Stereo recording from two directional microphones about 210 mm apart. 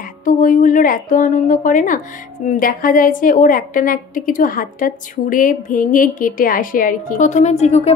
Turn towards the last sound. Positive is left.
turn(degrees=30)  # may be behind; listen again after turning